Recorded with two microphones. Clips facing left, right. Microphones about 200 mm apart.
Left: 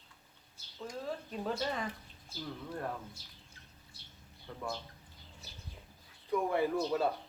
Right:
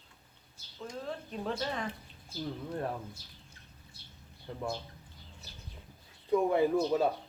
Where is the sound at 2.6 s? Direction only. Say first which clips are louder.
Right 3 dB; 20° right (ahead or behind).